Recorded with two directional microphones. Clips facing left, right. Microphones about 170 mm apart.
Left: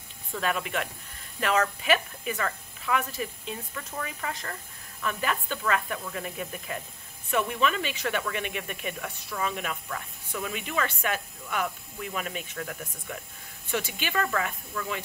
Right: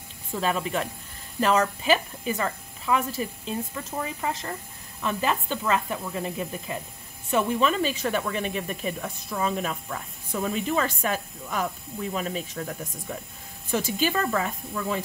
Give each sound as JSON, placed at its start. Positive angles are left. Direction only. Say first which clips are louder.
{"t": 0.3, "sound": "speech", "louder": "right 3 dB", "side_deg": -30}